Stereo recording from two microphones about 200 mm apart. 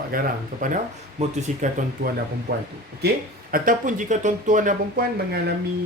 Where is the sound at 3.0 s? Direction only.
45° right (ahead or behind).